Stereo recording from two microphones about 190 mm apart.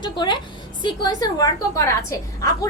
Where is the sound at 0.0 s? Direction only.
25° left (ahead or behind).